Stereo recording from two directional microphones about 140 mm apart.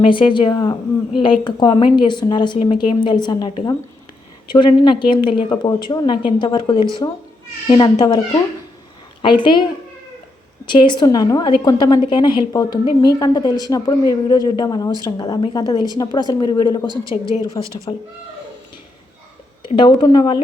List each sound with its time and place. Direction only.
0.0 s a woman's voice: 35° left (ahead or behind)
9.2 s a woman's voice: 35° left (ahead or behind)
10.7 s a woman's voice: 35° left (ahead or behind)
16.9 s a woman's voice: 25° right (ahead or behind)
17.4 s a woman's voice: 35° left (ahead or behind)
19.6 s a woman's voice: 35° left (ahead or behind)